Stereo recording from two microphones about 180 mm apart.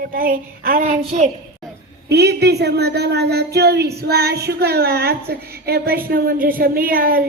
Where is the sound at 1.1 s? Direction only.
35° right (ahead or behind).